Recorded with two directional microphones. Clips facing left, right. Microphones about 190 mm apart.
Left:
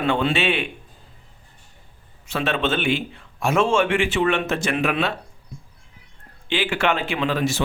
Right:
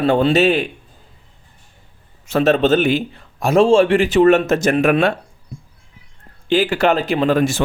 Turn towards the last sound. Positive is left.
turn(degrees=-50)  # may be behind; listen again after turning